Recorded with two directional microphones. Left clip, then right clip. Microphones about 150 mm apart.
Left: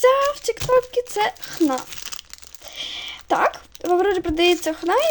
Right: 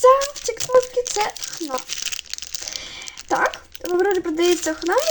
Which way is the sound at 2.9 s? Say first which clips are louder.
Left 2 dB; 55° left (ahead or behind).